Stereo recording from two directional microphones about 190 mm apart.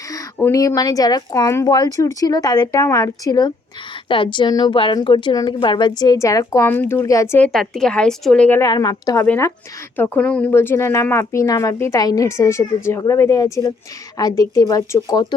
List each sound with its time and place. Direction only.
0.3 s a woman's voice: 15° left (ahead or behind)
9.2 s a woman's voice: 10° left (ahead or behind)